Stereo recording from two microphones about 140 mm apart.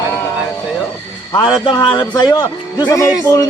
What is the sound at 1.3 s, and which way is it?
A man's voice, 30° left (ahead or behind).